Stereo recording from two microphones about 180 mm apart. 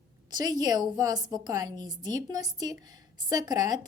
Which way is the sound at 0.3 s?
20° right (ahead or behind).